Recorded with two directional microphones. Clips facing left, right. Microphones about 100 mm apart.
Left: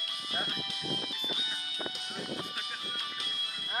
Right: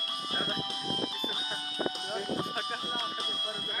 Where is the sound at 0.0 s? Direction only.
40° right (ahead or behind).